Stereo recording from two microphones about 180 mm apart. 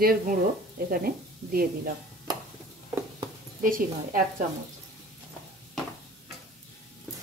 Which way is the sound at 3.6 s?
50° right (ahead or behind).